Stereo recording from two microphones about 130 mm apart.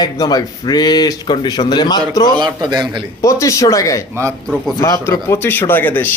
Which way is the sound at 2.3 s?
35° right (ahead or behind).